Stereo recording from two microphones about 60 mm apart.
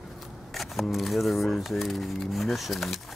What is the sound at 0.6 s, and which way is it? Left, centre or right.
Speech, centre.